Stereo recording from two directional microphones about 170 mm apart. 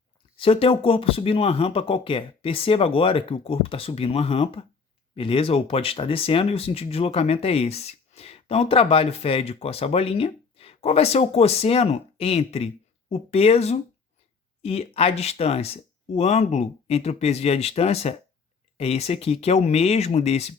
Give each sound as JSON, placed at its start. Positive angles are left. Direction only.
{"t": 0.3, "sound": "speech", "side_deg": 35}